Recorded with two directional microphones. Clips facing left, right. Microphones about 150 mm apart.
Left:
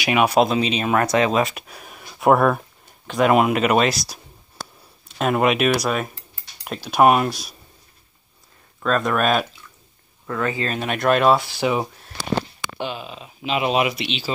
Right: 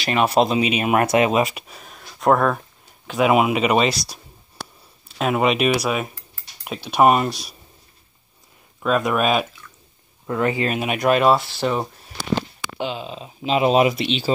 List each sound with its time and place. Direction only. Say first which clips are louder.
0.0 s speech: left 1 dB; 10° left (ahead or behind)
0.3 s speech: even; 5° right (ahead or behind)
3.1 s speech: even; 5° right (ahead or behind)
5.2 s speech: even; centre (ahead or behind)
8.8 s speech: right 1 dB; 10° right (ahead or behind)
10.2 s speech: right 3 dB; 20° right (ahead or behind); by 12.1 s 5° left (ahead or behind)
12.4 s speech: even; 20° right (ahead or behind); by 14.3 s 35° right (ahead or behind)